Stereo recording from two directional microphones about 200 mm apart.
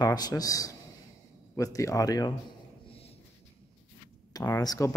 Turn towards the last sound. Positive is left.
turn(degrees=15)  # may be behind; listen again after turning